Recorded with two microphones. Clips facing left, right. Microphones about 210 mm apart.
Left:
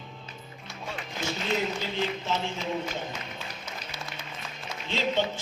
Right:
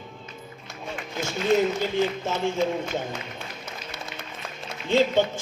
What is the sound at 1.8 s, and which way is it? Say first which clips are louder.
A man's voice: right 6 dB; 50° right (ahead or behind).